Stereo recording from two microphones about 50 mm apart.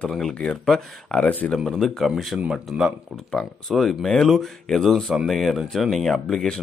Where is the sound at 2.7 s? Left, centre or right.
Centre.